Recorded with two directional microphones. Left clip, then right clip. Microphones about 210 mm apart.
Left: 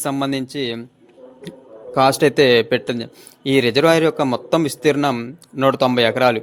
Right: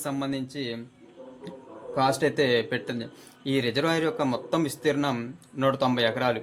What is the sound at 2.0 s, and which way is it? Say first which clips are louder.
Speech: left 10 dB; 40° left (ahead or behind).